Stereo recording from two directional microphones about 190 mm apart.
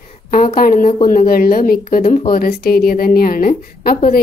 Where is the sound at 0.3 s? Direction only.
45° left (ahead or behind).